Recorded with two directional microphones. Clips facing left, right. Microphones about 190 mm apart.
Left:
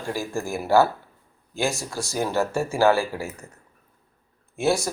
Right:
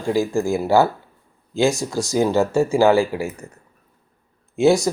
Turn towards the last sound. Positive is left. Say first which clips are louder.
# right 7 dB
turn(degrees=-15)  # may be behind; listen again after turning